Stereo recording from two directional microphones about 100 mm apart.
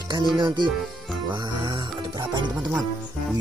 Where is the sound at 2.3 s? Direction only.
50° right (ahead or behind).